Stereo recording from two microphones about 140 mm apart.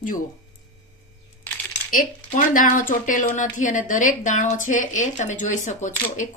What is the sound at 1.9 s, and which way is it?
A woman's voice, 75° left (ahead or behind).